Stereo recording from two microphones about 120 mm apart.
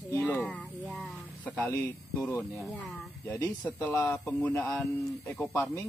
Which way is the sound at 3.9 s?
25° left (ahead or behind).